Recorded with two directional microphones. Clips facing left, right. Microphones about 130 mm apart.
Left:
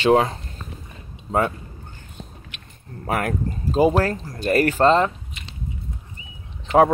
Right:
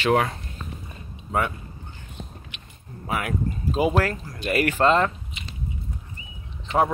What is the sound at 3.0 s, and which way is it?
Speech, 45° left (ahead or behind).